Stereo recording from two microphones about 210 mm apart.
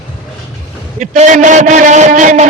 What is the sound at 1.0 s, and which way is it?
A man's voice, 35° right (ahead or behind).